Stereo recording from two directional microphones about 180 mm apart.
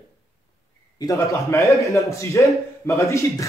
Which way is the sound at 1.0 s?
15° left (ahead or behind).